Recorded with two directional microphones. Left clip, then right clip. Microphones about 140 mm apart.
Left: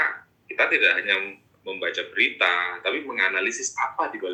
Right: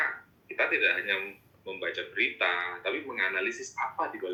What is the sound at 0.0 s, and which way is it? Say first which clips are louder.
Speech: left 6 dB; 30° left (ahead or behind).